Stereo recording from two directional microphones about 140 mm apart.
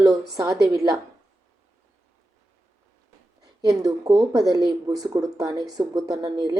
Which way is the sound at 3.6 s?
25° right (ahead or behind).